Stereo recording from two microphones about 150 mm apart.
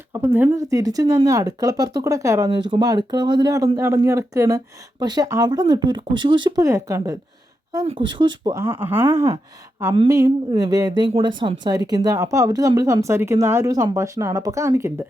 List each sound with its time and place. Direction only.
0.1 s speech: 15° right (ahead or behind)
2.5 s speech: 30° right (ahead or behind)
6.7 s speech: 20° right (ahead or behind)
7.9 s speech: 30° right (ahead or behind)
8.5 s speech: 15° right (ahead or behind)